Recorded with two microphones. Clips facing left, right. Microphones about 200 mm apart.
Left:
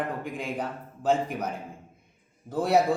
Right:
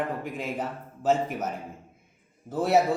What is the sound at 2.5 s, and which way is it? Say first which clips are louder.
Speech: even; 5° right (ahead or behind).